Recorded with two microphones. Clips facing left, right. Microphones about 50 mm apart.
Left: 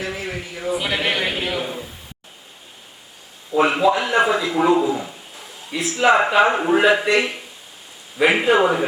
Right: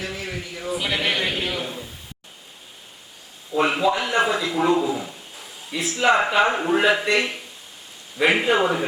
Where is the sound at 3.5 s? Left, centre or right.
Centre.